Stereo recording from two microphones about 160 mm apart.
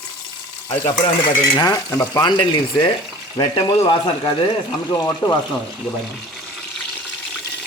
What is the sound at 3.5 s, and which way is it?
Speech, 25° left (ahead or behind).